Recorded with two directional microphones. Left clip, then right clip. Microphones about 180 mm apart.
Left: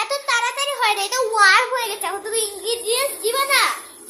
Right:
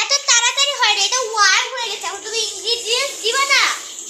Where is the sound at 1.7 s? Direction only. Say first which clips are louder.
Left 1 dB; 30° left (ahead or behind).